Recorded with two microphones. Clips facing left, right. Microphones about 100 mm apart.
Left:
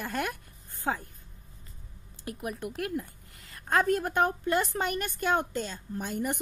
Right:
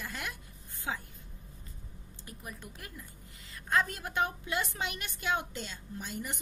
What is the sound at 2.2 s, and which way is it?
Speech, 65° left (ahead or behind).